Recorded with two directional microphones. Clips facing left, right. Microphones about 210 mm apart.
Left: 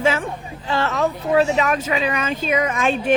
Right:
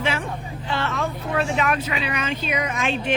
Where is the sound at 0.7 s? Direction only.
40° left (ahead or behind).